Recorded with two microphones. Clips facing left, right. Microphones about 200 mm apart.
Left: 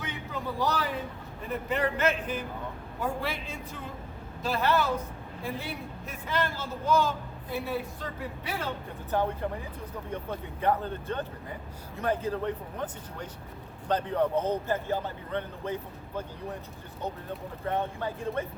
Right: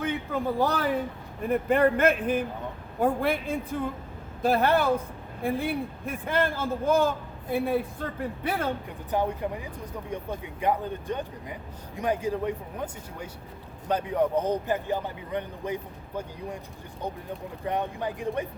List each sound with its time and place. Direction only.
0.0 s a sound: 50° right (ahead or behind)
1.5 s a man's voice: 55° right (ahead or behind)
9.1 s a man's voice: 15° right (ahead or behind)
17.7 s a man's voice: 15° right (ahead or behind)